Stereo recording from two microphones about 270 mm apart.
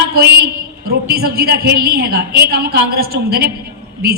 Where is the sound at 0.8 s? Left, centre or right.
Right.